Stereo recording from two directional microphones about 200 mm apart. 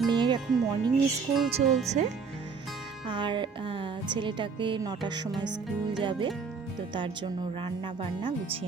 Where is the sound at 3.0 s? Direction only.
25° right (ahead or behind).